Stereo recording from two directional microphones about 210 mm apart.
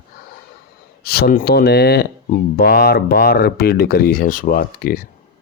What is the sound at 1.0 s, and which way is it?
Speech, 45° left (ahead or behind).